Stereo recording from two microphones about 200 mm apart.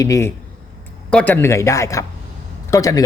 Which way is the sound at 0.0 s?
15° left (ahead or behind).